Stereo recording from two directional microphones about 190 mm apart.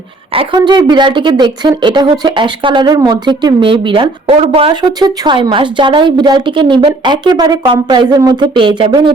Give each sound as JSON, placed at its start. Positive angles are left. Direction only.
{"t": 0.3, "sound": "speech", "side_deg": -25}